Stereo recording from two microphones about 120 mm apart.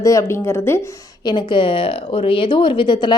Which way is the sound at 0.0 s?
25° left (ahead or behind).